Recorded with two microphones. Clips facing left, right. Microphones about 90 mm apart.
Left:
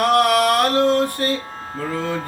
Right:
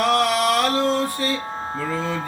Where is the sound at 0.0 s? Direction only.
55° left (ahead or behind).